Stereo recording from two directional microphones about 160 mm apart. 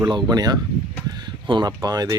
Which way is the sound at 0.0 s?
25° right (ahead or behind).